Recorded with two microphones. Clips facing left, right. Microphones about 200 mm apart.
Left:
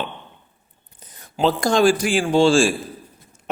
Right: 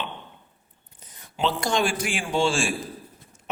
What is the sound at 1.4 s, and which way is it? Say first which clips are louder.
A man's voice: left 7 dB; 40° left (ahead or behind).